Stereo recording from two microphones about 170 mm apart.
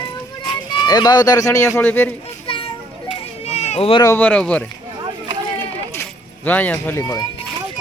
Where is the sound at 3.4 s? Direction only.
40° left (ahead or behind).